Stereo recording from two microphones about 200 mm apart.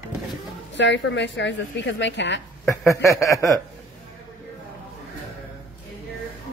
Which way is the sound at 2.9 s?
15° left (ahead or behind).